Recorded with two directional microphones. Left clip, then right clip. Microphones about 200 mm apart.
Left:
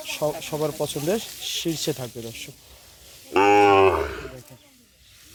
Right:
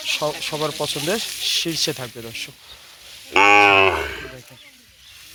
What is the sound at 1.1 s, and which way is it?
Speech, 5° left (ahead or behind).